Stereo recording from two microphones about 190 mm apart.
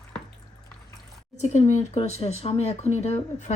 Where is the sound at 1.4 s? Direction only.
40° left (ahead or behind).